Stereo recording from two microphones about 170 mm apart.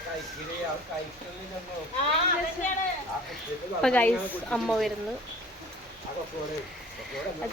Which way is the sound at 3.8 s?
10° left (ahead or behind).